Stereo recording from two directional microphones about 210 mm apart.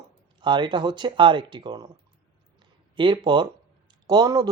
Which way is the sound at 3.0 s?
25° right (ahead or behind).